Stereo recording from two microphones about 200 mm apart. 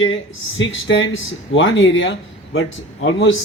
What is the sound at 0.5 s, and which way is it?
Speech, 70° left (ahead or behind).